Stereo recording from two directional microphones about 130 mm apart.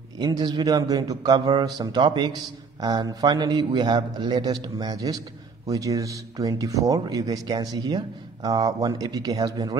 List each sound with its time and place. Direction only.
0.2 s a man's voice: 30° right (ahead or behind)